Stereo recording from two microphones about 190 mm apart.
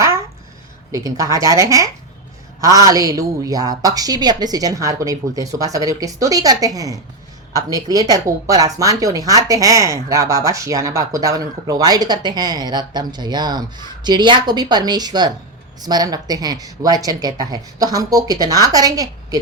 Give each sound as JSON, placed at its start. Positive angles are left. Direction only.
{"t": 0.9, "sound": "a woman's voice", "side_deg": -15}